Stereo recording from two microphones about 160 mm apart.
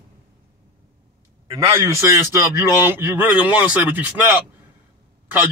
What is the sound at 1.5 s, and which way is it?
A man's voice, 20° right (ahead or behind).